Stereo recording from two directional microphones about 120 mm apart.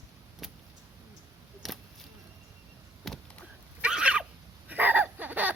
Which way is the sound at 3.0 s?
5° left (ahead or behind).